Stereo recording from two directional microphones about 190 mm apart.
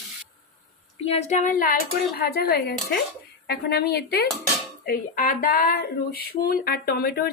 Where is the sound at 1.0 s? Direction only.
35° left (ahead or behind).